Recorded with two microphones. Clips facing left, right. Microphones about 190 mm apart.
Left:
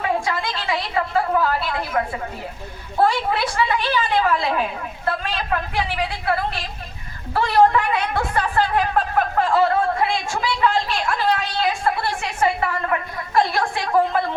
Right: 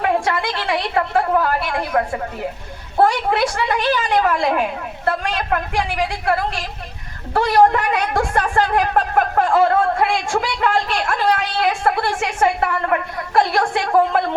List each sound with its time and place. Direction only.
0.0 s a woman's voice: 60° right (ahead or behind)